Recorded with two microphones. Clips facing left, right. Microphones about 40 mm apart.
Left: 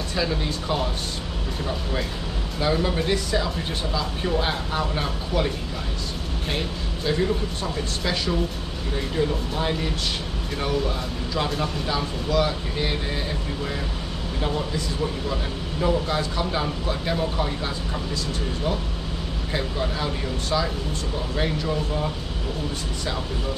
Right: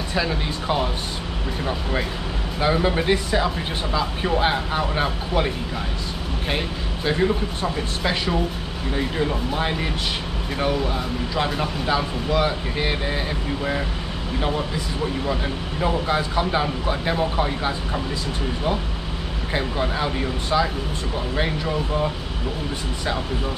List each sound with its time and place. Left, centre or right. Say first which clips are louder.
0.1 s speech: right 1 dB; centre
7.1 s speech: right 2 dB; right
11.3 s speech: right 1 dB; centre
15.8 s speech: right 1 dB; right
19.5 s speech: right 3 dB; right